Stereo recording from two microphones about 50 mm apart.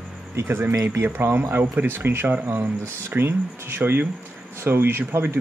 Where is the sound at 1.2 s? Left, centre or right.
Right.